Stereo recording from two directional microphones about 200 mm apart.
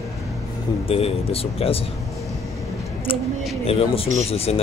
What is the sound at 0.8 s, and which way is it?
Speech, 30° left (ahead or behind).